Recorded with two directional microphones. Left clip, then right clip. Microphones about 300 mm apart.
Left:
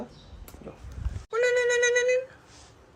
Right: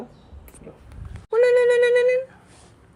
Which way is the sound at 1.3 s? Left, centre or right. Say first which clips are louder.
Right 7 dB; centre.